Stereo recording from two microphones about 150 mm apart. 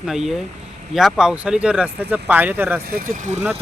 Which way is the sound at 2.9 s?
60° right (ahead or behind).